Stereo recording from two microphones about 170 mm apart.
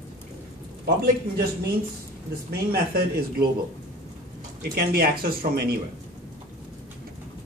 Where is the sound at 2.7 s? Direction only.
65° right (ahead or behind).